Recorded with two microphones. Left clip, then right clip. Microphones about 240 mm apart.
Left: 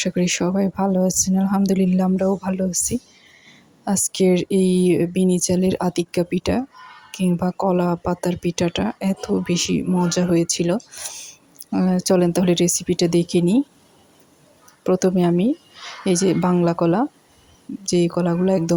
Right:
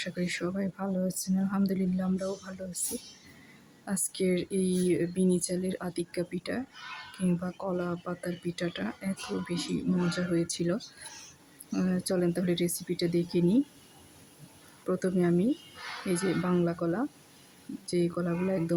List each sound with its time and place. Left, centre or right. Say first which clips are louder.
0.0 s speech: left 12 dB; left
3.8 s speech: left 12 dB; left
11.9 s speech: left 12 dB; left
14.8 s speech: left 10 dB; left